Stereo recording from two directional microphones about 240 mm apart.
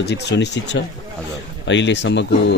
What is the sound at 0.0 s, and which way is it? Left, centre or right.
Speech, left.